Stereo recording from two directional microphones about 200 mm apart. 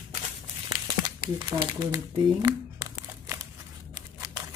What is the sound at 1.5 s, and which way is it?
Speech, 20° right (ahead or behind).